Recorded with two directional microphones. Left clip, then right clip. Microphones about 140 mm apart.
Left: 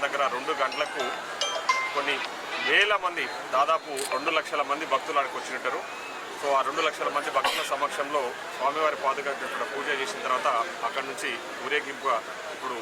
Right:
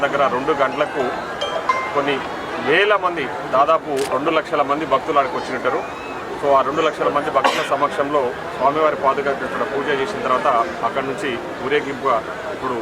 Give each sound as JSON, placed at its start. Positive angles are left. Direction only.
{"t": 0.0, "sound": "a man's voice", "side_deg": -15}
{"t": 2.6, "sound": "a man's voice", "side_deg": -10}